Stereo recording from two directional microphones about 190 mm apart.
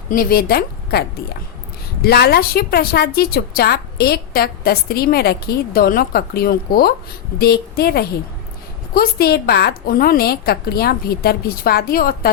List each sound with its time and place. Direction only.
0.1 s a woman's voice: 50° left (ahead or behind)